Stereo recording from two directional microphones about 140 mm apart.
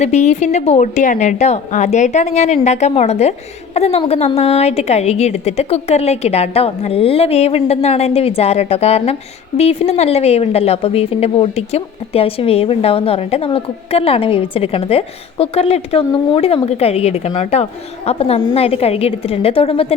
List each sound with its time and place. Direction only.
0.0 s a woman's voice: 50° left (ahead or behind)